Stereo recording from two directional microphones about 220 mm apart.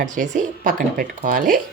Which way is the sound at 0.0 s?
35° right (ahead or behind).